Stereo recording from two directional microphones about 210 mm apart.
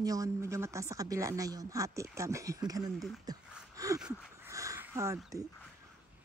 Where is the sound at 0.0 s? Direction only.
15° right (ahead or behind).